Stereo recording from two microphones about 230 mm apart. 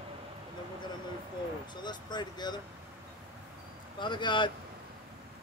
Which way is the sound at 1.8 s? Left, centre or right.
Centre.